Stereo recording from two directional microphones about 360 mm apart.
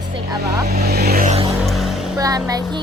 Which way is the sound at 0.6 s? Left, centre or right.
Right.